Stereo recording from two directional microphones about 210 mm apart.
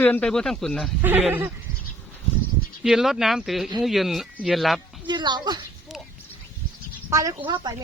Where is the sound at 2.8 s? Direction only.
Centre (ahead or behind).